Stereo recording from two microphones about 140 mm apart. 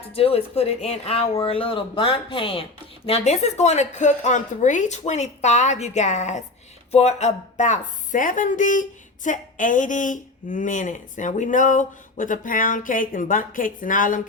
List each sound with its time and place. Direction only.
0.1 s speech: 45° left (ahead or behind)
3.1 s a woman's voice: 50° left (ahead or behind); by 14.2 s 70° left (ahead or behind)